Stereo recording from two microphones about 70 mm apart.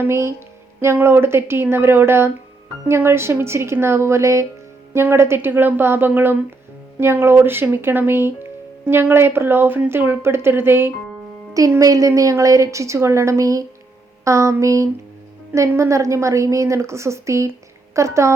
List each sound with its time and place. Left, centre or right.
0.0 s a woman's voice: right
11.8 s a woman's voice: right